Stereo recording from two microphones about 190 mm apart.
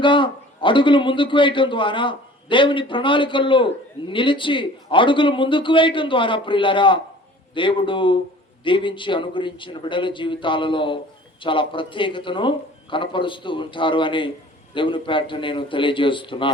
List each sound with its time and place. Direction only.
0.0 s a man's voice: 25° left (ahead or behind)